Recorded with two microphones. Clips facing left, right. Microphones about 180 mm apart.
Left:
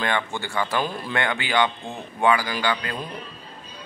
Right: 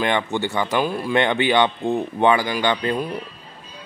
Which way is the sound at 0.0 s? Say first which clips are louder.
Right 5 dB; 20° right (ahead or behind).